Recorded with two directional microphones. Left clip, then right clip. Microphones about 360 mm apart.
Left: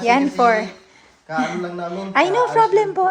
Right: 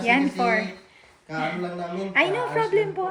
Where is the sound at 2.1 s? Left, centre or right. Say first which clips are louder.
Left 6 dB; centre.